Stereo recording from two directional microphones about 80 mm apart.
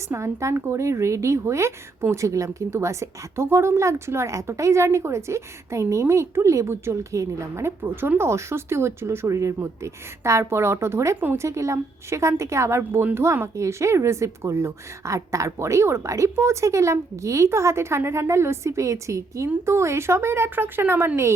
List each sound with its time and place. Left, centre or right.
0.1 s a woman's voice: right